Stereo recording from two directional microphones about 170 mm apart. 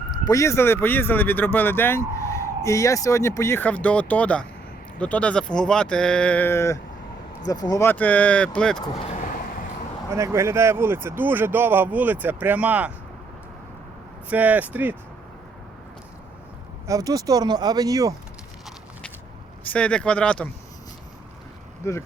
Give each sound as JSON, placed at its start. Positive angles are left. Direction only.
{"t": 0.3, "sound": "speech", "side_deg": 15}
{"t": 9.0, "sound": "vehicle", "side_deg": 45}
{"t": 10.2, "sound": "speech", "side_deg": -15}
{"t": 14.3, "sound": "speech", "side_deg": -10}
{"t": 16.8, "sound": "speech", "side_deg": -20}
{"t": 19.6, "sound": "speech", "side_deg": 5}
{"t": 21.8, "sound": "speech", "side_deg": 15}